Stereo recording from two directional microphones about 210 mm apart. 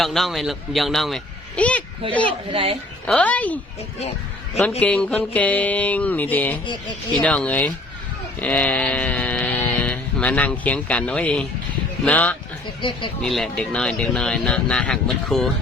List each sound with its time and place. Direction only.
0.0 s speech: centre (ahead or behind)
2.5 s speech: 25° right (ahead or behind)
3.1 s speech: 5° left (ahead or behind)
4.8 s speech: 5° left (ahead or behind)
8.4 s a sound: 5° left (ahead or behind)
12.0 s speech: 5° left (ahead or behind)
12.8 s speech: 25° left (ahead or behind)
13.2 s speech: centre (ahead or behind)